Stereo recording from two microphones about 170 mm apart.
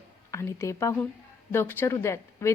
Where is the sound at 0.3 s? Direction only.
15° left (ahead or behind).